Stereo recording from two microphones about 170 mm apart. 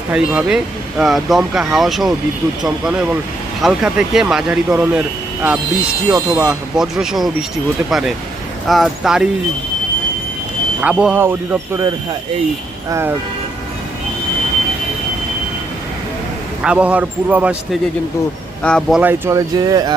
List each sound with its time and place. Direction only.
0.1 s speech: 5° right (ahead or behind)
6.1 s speech: 20° right (ahead or behind)
6.4 s speech: 5° right (ahead or behind)
10.8 s a man's voice: 5° right (ahead or behind)
12.9 s a man's voice: 15° right (ahead or behind)
16.6 s a man's voice: 10° right (ahead or behind)
18.6 s speech: 5° left (ahead or behind)
18.9 s speech: 10° right (ahead or behind)